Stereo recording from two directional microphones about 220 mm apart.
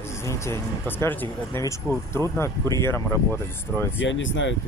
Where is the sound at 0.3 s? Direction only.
10° left (ahead or behind).